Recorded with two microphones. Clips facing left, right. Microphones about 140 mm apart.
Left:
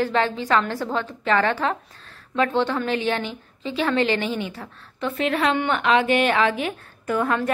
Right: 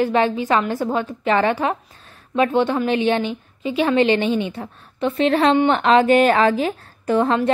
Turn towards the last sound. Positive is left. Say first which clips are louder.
# right 5 dB
turn(degrees=-25)  # may be behind; listen again after turning